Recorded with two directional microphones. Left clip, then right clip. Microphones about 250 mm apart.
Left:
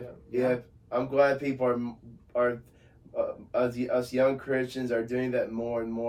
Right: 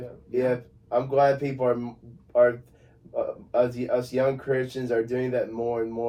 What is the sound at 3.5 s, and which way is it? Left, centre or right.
Speech, centre.